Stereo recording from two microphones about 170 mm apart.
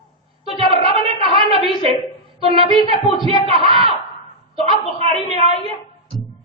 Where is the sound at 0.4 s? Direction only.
35° right (ahead or behind).